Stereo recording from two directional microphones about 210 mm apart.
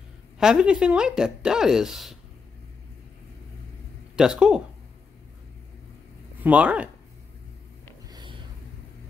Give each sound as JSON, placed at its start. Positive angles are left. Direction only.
{"t": 0.4, "sound": "speech", "side_deg": -5}
{"t": 4.2, "sound": "speech", "side_deg": -5}
{"t": 6.4, "sound": "speech", "side_deg": -5}
{"t": 8.1, "sound": "a sound", "side_deg": -20}